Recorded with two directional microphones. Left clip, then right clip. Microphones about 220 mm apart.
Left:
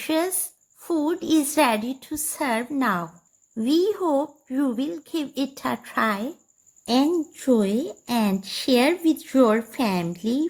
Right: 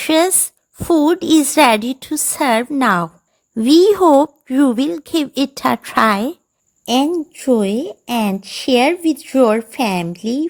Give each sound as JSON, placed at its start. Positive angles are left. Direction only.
{"t": 0.0, "sound": "a woman's voice", "side_deg": -45}
{"t": 6.8, "sound": "a woman's voice", "side_deg": -30}